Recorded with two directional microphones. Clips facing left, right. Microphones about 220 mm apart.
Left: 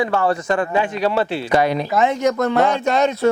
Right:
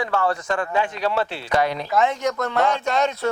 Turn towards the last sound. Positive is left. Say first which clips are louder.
# left 5 dB
turn(degrees=10)  # may be behind; listen again after turning